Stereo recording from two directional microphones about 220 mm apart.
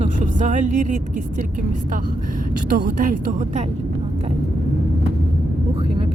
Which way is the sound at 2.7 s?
40° right (ahead or behind).